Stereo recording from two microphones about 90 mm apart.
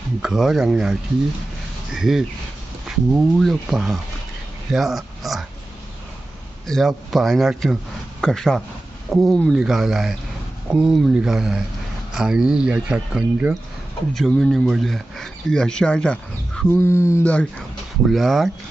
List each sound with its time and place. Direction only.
0.2 s speech: 5° right (ahead or behind)
4.7 s a sound: centre (ahead or behind)
6.7 s speech: centre (ahead or behind)
14.1 s speech: 5° left (ahead or behind)
16.6 s speech: 25° left (ahead or behind)
18.0 s speech: centre (ahead or behind)